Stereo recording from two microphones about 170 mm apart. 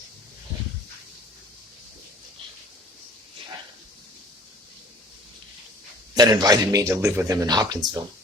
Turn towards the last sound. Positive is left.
turn(degrees=-20)  # may be behind; listen again after turning